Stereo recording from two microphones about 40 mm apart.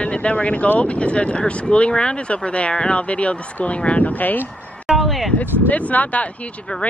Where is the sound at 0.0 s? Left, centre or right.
Left.